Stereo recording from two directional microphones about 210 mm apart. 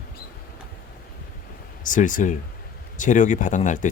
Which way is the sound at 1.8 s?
40° left (ahead or behind).